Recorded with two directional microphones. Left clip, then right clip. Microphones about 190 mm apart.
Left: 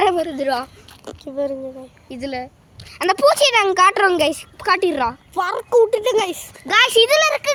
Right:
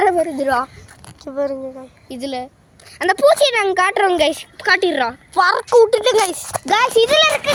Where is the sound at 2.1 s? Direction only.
15° right (ahead or behind).